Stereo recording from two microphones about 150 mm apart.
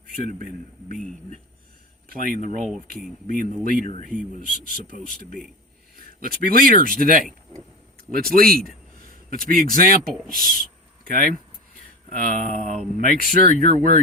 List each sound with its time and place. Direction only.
2.0 s speech: 65° right (ahead or behind)
3.3 s speech: 65° right (ahead or behind)
4.4 s speech: 60° left (ahead or behind)
6.0 s speech: 75° right (ahead or behind)
12.0 s speech: 60° right (ahead or behind)